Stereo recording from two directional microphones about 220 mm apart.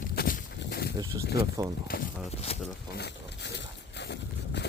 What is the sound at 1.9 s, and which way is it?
Speech, 40° left (ahead or behind).